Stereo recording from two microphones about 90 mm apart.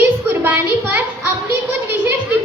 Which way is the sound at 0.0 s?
20° right (ahead or behind).